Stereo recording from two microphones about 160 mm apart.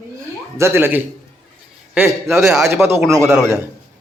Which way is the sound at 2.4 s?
Centre (ahead or behind).